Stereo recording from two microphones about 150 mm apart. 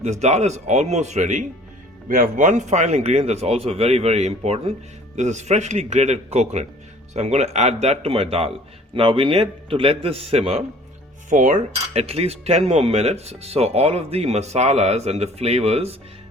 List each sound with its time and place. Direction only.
0.0 s speech: 50° right (ahead or behind)
2.0 s a man's voice: 65° right (ahead or behind); by 10.6 s 40° right (ahead or behind)
11.3 s speech: 60° right (ahead or behind)